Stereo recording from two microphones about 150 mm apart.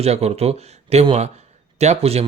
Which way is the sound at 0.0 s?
45° right (ahead or behind).